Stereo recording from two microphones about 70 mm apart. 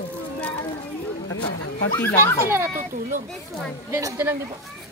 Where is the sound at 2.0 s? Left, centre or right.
Left.